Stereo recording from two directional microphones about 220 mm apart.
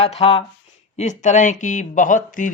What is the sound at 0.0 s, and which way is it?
Speech, 25° left (ahead or behind).